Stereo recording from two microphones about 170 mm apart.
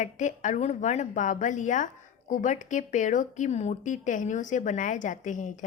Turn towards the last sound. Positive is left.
turn(degrees=45)  # may be behind; listen again after turning